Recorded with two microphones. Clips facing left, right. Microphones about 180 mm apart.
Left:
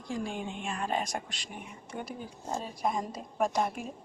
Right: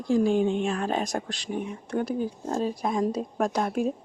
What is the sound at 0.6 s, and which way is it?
Speech, 75° right (ahead or behind).